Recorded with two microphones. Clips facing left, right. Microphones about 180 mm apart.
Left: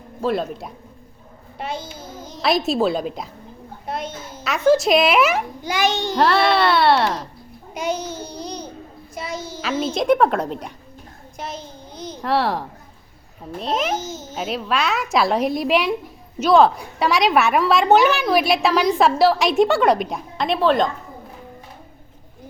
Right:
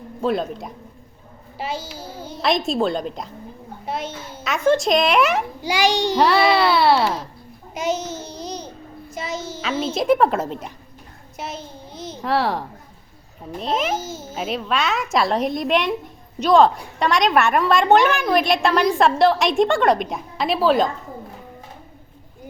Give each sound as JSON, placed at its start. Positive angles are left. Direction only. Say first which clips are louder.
{"t": 0.2, "sound": "a woman's voice", "louder": "even", "side_deg": 0}
{"t": 2.0, "sound": "a sound", "louder": "right 2 dB", "side_deg": -30}
{"t": 2.3, "sound": "a woman's voice", "louder": "left 1 dB", "side_deg": 0}
{"t": 5.6, "sound": "a child's voice", "louder": "right 3 dB", "side_deg": -15}
{"t": 6.1, "sound": "a woman's voice", "louder": "left 1 dB", "side_deg": 0}
{"t": 7.7, "sound": "child singing", "louder": "right 1 dB", "side_deg": -5}
{"t": 9.6, "sound": "a woman's voice", "louder": "left 1 dB", "side_deg": 0}